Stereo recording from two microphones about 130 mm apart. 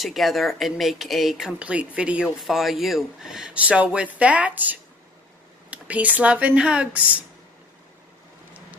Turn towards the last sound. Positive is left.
turn(degrees=-10)  # may be behind; listen again after turning